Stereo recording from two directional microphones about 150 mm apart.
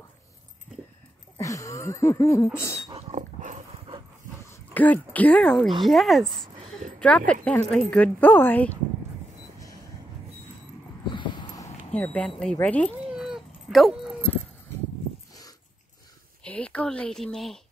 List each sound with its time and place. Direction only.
1.4 s a sound: 20° left (ahead or behind)
2.9 s dog: 45° right (ahead or behind)
4.7 s speech: 10° left (ahead or behind)
11.1 s a sound: 30° left (ahead or behind)
11.9 s speech: 10° left (ahead or behind)
13.1 s cat: 5° right (ahead or behind)
16.4 s speech: 10° left (ahead or behind)